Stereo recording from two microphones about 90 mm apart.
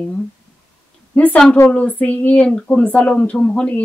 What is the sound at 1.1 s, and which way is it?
A woman's voice, 20° left (ahead or behind).